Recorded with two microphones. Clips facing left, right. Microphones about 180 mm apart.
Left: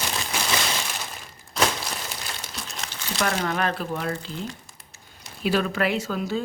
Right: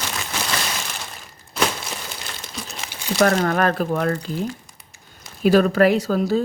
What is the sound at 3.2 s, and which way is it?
Speech, 50° right (ahead or behind).